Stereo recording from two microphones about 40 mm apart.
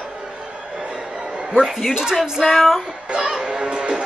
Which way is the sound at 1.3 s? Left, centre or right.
Centre.